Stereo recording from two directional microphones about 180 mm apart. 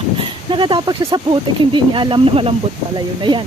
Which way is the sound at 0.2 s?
25° right (ahead or behind).